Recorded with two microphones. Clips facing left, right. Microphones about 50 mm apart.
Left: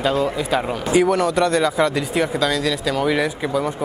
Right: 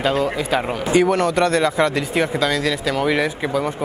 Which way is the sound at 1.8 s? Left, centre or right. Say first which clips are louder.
Even; right.